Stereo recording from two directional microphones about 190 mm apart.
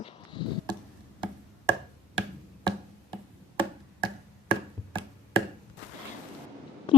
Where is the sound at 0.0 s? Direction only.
25° left (ahead or behind).